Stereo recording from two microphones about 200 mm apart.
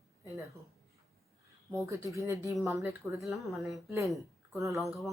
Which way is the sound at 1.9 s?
15° right (ahead or behind).